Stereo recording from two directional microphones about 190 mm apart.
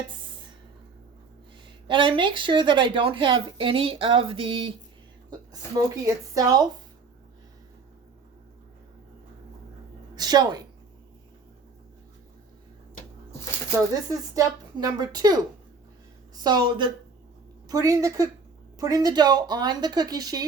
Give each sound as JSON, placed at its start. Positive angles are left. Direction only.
{"t": 1.9, "sound": "speech", "side_deg": -25}
{"t": 5.7, "sound": "speech", "side_deg": -20}
{"t": 10.2, "sound": "a woman's voice", "side_deg": -20}
{"t": 14.1, "sound": "speech", "side_deg": -20}
{"t": 16.4, "sound": "speech", "side_deg": -20}